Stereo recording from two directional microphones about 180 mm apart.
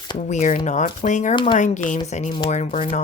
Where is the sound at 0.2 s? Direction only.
40° left (ahead or behind).